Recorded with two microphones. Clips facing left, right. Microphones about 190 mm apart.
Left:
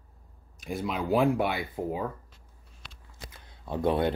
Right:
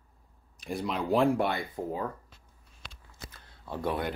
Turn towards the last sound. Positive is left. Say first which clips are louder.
# left 6 dB
turn(degrees=25)  # may be behind; listen again after turning